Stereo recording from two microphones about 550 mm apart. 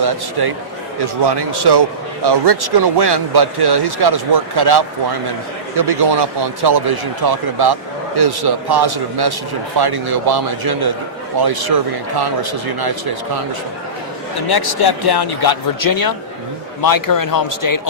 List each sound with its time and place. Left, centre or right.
0.0 s speech: right
14.5 s speech: left